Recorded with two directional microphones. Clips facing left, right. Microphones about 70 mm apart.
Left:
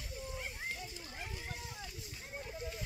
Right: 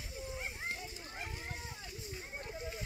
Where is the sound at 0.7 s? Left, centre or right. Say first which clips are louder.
Right 1 dB; right.